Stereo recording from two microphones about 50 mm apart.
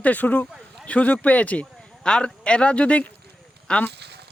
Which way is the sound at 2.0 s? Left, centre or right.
Centre.